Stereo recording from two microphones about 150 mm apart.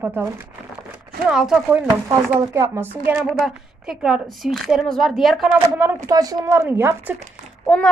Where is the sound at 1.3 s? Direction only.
5° right (ahead or behind).